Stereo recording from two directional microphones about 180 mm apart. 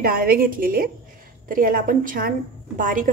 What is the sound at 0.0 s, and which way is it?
Speech, 55° right (ahead or behind).